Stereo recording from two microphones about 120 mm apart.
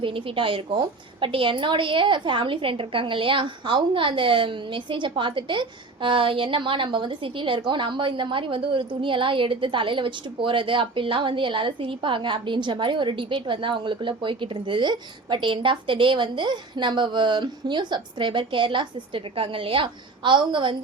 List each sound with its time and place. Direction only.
0.0 s a woman's voice: 45° right (ahead or behind)